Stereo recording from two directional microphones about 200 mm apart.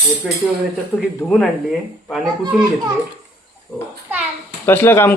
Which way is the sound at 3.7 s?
10° left (ahead or behind).